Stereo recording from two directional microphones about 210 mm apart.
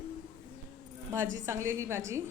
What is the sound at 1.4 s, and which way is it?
Speech, 15° right (ahead or behind).